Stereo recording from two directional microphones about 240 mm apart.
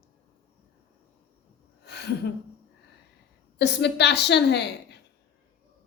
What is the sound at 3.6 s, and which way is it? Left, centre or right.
A woman's voice, left.